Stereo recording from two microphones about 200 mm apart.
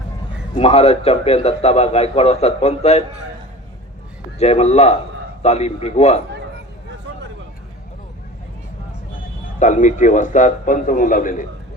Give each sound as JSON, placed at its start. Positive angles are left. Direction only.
{"t": 0.5, "sound": "a man's voice", "side_deg": 30}
{"t": 4.4, "sound": "a man's voice", "side_deg": 35}
{"t": 9.6, "sound": "a man's voice", "side_deg": 40}